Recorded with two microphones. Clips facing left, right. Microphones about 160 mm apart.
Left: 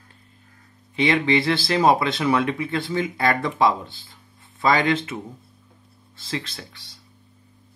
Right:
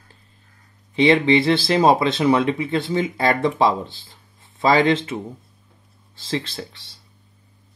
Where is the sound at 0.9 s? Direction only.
25° right (ahead or behind).